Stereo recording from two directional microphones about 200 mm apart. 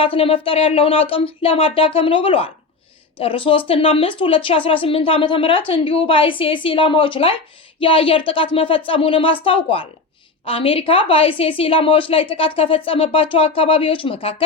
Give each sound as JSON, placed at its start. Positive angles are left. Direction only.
{"t": 0.0, "sound": "a woman's voice", "side_deg": 25}